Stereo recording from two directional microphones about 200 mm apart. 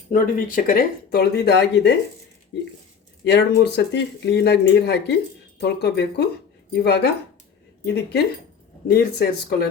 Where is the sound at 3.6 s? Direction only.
55° left (ahead or behind).